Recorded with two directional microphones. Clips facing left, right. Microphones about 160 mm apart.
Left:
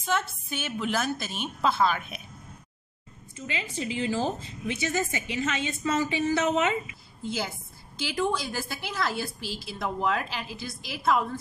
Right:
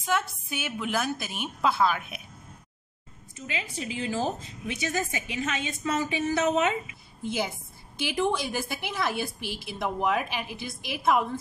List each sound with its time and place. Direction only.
0.0 s a woman's voice: 10° right (ahead or behind)
3.3 s a woman's voice: 10° right (ahead or behind)